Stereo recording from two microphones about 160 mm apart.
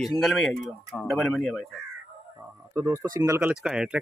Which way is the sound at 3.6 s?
5° right (ahead or behind).